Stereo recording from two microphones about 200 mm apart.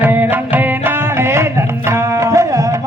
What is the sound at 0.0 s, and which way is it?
Music, 10° right (ahead or behind).